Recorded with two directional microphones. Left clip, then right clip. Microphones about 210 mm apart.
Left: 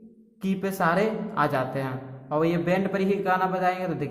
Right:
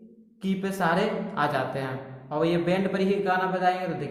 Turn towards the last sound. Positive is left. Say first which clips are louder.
# even
turn(degrees=20)  # may be behind; listen again after turning